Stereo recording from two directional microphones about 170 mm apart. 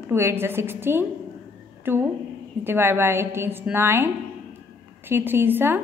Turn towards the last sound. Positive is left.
turn(degrees=-15)  # may be behind; listen again after turning